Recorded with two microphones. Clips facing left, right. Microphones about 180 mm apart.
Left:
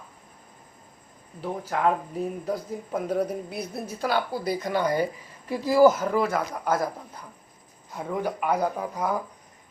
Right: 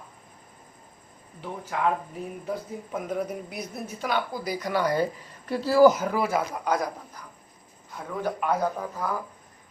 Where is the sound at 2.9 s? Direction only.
35° left (ahead or behind); by 5.9 s 10° left (ahead or behind).